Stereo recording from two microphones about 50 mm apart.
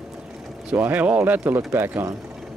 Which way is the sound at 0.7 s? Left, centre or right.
Right.